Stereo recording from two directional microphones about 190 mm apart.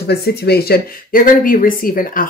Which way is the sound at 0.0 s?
55° left (ahead or behind).